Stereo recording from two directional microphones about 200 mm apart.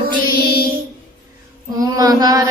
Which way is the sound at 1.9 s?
20° right (ahead or behind).